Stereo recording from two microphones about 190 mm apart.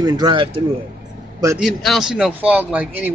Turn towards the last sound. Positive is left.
turn(degrees=-10)  # may be behind; listen again after turning